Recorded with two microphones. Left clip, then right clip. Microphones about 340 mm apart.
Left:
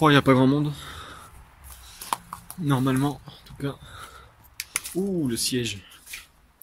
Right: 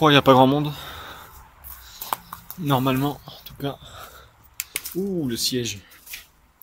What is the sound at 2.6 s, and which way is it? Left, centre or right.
Speech, centre.